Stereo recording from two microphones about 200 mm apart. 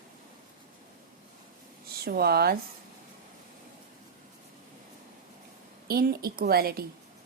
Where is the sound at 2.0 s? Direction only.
50° right (ahead or behind).